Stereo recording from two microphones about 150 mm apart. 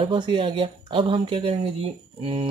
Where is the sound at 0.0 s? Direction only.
35° right (ahead or behind).